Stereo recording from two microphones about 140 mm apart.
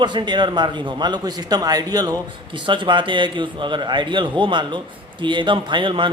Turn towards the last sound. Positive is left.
turn(degrees=-35)  # may be behind; listen again after turning